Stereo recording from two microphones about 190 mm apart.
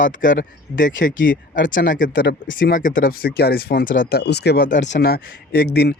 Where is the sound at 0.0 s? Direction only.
45° left (ahead or behind).